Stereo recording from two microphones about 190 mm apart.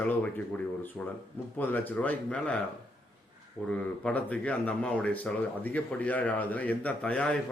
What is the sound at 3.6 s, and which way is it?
Speech, 5° left (ahead or behind).